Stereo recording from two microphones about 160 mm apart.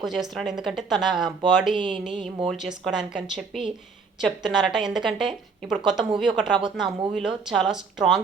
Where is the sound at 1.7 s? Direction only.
30° right (ahead or behind).